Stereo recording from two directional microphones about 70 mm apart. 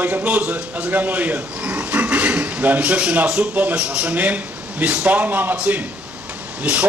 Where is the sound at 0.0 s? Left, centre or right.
Right.